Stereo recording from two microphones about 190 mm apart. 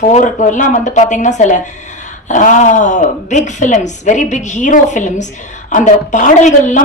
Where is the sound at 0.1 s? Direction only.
40° left (ahead or behind).